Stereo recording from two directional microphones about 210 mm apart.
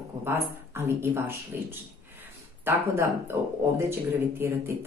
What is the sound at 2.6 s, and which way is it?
Speech, 10° right (ahead or behind).